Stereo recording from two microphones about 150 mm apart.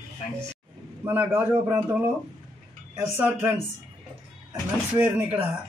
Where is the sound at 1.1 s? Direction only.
15° right (ahead or behind).